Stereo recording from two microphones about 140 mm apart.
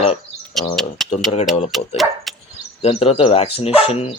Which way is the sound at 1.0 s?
Centre (ahead or behind).